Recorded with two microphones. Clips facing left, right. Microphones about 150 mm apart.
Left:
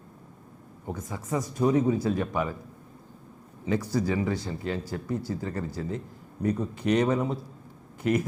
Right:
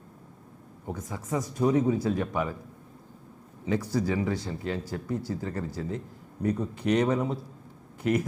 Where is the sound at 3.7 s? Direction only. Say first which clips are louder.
Left 1 dB; 20° left (ahead or behind).